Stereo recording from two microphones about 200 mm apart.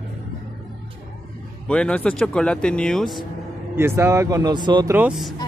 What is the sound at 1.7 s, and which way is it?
Speech, 5° left (ahead or behind).